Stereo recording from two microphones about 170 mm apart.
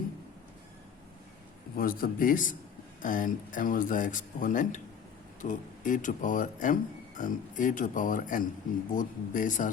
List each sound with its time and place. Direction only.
1.7 s a man's voice: 60° left (ahead or behind)